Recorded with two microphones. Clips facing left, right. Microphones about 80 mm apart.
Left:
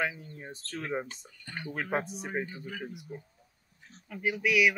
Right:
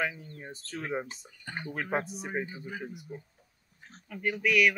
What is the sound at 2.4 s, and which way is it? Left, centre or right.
Speech, centre.